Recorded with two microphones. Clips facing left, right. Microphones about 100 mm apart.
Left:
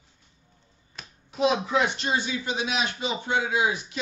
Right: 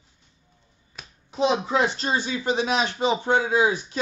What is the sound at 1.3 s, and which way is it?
Speech, 30° right (ahead or behind).